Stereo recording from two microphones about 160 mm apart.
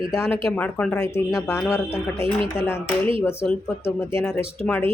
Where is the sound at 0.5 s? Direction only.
10° left (ahead or behind).